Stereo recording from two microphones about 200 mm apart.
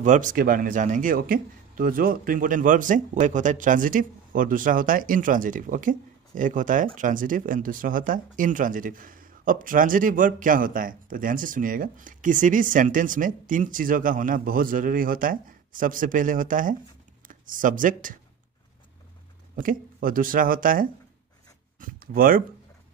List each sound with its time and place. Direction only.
0.0 s speech: 40° right (ahead or behind)
19.5 s speech: 45° right (ahead or behind)